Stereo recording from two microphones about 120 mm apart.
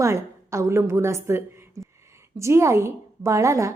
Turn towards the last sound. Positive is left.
turn(degrees=-25)  # may be behind; listen again after turning